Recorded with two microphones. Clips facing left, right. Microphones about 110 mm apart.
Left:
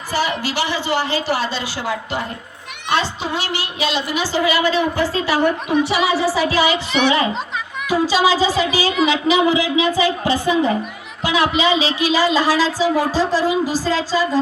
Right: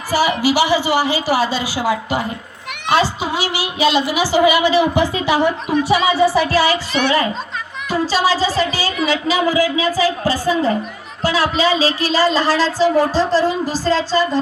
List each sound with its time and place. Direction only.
0.1 s a woman's voice: 10° right (ahead or behind)
6.2 s a woman's voice: 5° left (ahead or behind)